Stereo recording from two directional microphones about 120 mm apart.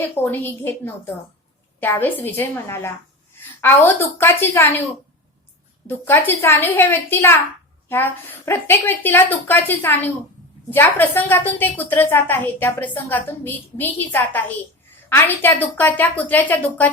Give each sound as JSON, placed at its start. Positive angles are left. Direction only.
{"t": 0.0, "sound": "a woman's voice", "side_deg": 15}
{"t": 5.9, "sound": "a woman's voice", "side_deg": 20}